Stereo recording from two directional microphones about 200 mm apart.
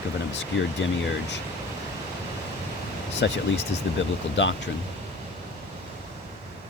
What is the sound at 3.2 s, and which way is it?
Speech, 60° left (ahead or behind).